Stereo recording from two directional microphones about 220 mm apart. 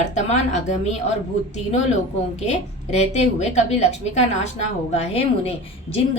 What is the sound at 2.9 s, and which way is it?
A woman's voice, 30° left (ahead or behind).